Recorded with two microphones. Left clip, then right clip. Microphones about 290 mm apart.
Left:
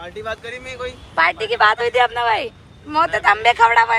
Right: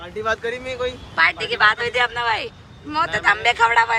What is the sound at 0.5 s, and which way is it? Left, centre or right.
Speech, centre.